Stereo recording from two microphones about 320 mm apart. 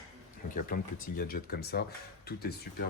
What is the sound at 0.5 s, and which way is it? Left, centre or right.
Speech, left.